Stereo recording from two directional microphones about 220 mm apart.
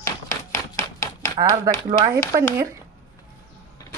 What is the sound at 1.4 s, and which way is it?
Speech, 20° right (ahead or behind).